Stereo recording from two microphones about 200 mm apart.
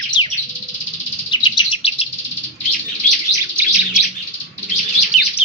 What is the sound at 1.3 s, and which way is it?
Chirp, 20° left (ahead or behind).